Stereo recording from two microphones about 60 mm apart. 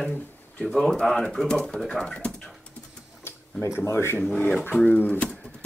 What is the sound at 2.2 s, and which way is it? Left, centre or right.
Dog, centre.